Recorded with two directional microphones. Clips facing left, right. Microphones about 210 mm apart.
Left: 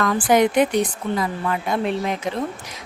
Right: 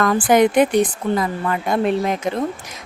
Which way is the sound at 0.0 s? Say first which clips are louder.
Right 3 dB; 50° right (ahead or behind).